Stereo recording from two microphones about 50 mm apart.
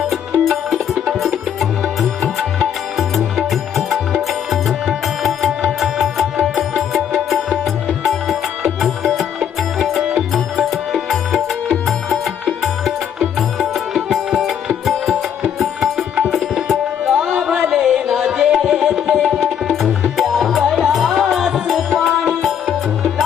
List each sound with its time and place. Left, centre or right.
0.1 s music: centre
2.6 s music: centre
8.8 s music: centre
12.8 s music: centre
17.2 s music: centre
18.2 s tabla: centre
19.3 s music: centre